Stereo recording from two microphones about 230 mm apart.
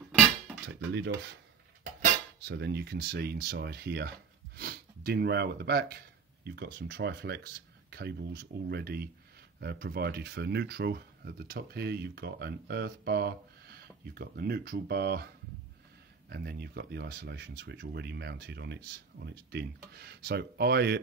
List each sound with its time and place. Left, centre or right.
0.7 s speech: right
2.4 s speech: right
16.3 s speech: right